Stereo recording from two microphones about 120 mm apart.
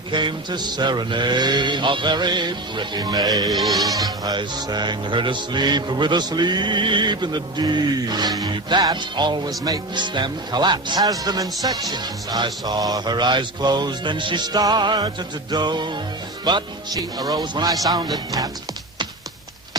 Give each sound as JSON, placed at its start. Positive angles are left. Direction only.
{"t": 0.1, "sound": "music", "side_deg": -40}
{"t": 3.5, "sound": "music", "side_deg": 0}
{"t": 3.8, "sound": "music", "side_deg": -30}